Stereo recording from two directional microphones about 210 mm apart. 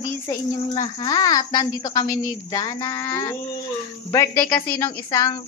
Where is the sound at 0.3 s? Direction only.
15° left (ahead or behind).